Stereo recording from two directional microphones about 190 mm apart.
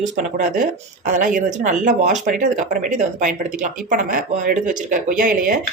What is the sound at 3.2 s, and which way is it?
Speech, 40° right (ahead or behind).